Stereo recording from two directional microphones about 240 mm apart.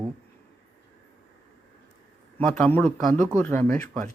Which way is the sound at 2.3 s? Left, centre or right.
Centre.